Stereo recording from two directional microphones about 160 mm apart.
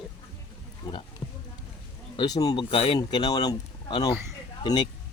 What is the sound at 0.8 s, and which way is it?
Speech, 20° left (ahead or behind).